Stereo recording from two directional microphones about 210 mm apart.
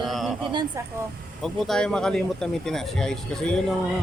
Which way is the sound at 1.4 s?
5° left (ahead or behind).